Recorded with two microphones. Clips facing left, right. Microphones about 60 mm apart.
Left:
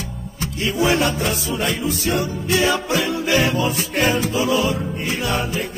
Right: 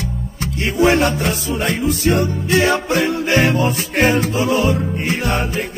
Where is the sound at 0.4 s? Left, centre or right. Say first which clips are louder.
Right 4 dB; right.